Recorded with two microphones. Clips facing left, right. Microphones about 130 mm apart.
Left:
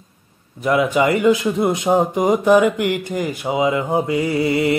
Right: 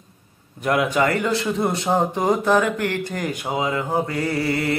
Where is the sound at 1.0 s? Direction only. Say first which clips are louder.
Left 5 dB; 15° left (ahead or behind).